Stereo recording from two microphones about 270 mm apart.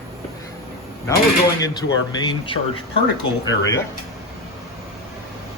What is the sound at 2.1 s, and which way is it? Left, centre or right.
Speech, centre.